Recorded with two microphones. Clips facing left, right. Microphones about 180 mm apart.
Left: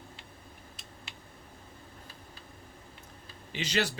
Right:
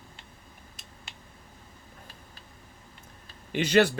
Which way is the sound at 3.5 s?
55° right (ahead or behind).